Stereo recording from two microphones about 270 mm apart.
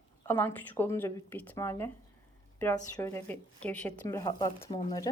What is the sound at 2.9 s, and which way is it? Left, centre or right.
A woman's voice, centre.